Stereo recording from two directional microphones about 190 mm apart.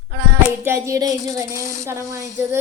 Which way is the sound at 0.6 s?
15° right (ahead or behind).